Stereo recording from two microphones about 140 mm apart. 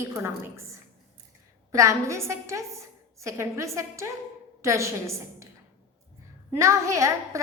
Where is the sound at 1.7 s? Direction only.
20° right (ahead or behind).